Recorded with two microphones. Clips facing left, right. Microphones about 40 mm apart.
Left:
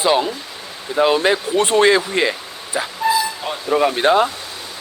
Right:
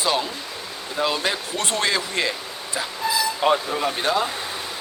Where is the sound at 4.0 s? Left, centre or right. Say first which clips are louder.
Left 7 dB; left.